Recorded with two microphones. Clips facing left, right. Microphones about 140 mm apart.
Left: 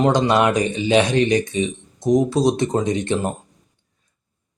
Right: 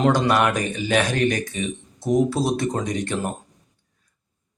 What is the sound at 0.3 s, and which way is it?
Speech, 20° left (ahead or behind).